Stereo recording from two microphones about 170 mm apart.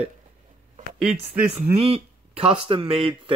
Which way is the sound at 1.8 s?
35° right (ahead or behind).